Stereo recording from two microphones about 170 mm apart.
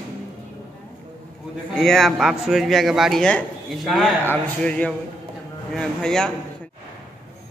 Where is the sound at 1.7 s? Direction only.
Centre (ahead or behind).